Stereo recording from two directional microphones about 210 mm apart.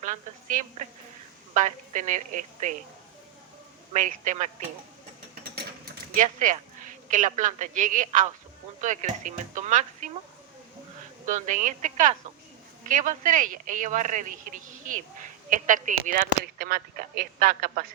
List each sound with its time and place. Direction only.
0.0 s speech: 35° right (ahead or behind)
3.9 s speech: 35° right (ahead or behind)
6.1 s a man's voice: 40° right (ahead or behind)
11.3 s speech: 35° right (ahead or behind)